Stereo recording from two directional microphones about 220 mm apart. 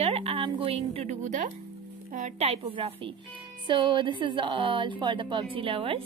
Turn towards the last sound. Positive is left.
turn(degrees=-25)  # may be behind; listen again after turning